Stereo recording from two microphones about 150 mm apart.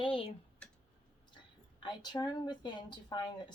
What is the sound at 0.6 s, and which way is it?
Tick, 5° left (ahead or behind).